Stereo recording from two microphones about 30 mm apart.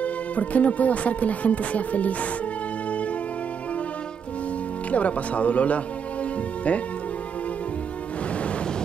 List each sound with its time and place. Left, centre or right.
0.0 s speech: left
4.9 s speech: left